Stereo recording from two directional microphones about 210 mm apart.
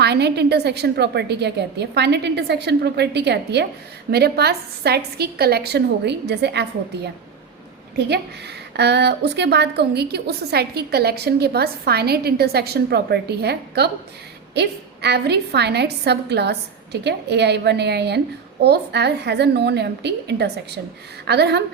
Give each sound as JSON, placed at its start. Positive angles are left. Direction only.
{"t": 0.0, "sound": "a woman's voice", "side_deg": -50}